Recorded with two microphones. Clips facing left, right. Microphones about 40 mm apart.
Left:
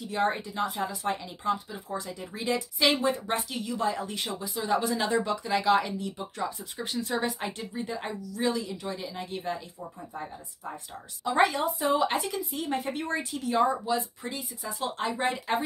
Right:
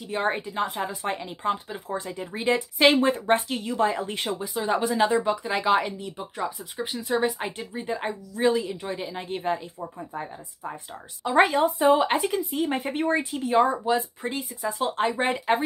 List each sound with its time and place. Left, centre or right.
0.1 s speech: right